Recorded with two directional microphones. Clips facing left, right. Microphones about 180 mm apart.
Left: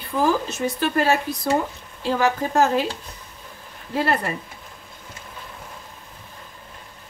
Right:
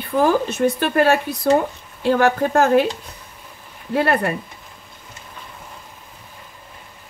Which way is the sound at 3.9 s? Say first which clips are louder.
Right 4 dB; 60° right (ahead or behind).